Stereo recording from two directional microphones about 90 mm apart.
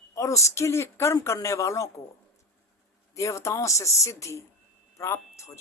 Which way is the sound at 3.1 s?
35° left (ahead or behind).